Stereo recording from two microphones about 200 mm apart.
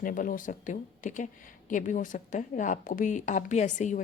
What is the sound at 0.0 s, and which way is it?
A woman's voice, 40° left (ahead or behind).